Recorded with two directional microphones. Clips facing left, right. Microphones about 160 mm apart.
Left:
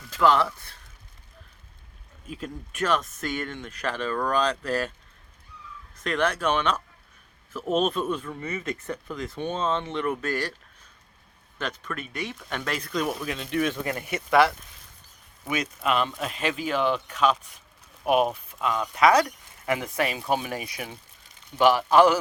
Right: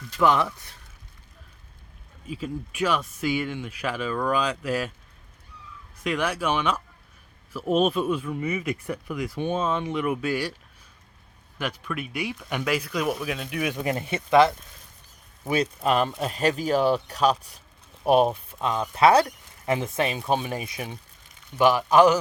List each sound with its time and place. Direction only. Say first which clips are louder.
0.2 s speech: even; 15° right (ahead or behind)
2.2 s speech: right 4 dB; 5° right (ahead or behind)
6.0 s speech: left 1 dB; 10° right (ahead or behind)
11.5 s speech: right 2 dB; 10° right (ahead or behind)
13.8 s speech: right 3 dB; 25° right (ahead or behind)
15.4 s chopping: right 4 dB; 35° right (ahead or behind)
18.0 s speech: right 3 dB; 30° right (ahead or behind)